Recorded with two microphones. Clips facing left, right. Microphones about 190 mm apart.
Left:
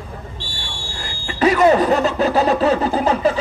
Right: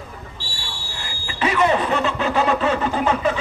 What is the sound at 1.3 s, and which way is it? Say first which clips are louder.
Speech: left 6 dB; 40° left (ahead or behind).